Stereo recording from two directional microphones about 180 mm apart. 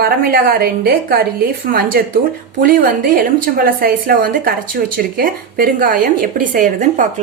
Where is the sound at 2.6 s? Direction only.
50° right (ahead or behind).